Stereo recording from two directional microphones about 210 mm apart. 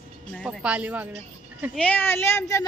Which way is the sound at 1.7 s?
5° left (ahead or behind).